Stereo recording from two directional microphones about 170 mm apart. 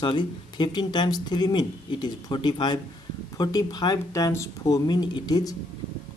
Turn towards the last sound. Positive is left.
turn(degrees=25)  # may be behind; listen again after turning